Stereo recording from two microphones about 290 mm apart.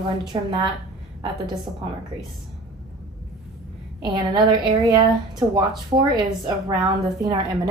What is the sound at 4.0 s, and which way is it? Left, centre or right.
A woman's voice, centre.